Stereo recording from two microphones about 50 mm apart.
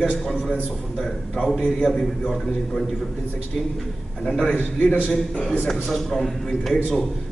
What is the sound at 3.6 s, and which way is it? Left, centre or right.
Speech, centre.